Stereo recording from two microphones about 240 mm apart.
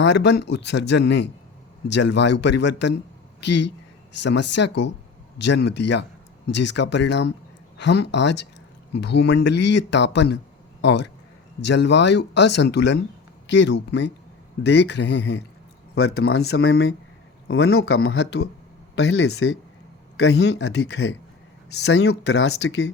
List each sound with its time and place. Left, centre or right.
0.0 s speech: left
16.6 s speech: left
17.9 s speech: left